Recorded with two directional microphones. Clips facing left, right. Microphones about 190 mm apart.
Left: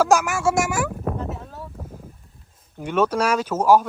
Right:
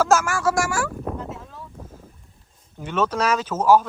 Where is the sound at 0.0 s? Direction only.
15° left (ahead or behind).